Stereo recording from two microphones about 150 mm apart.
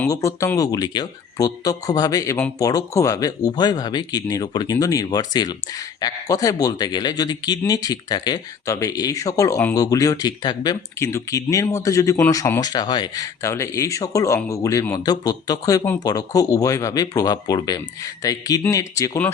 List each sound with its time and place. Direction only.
0.1 s speech: 20° left (ahead or behind)